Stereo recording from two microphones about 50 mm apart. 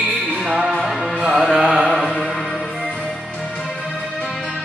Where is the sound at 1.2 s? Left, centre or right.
Centre.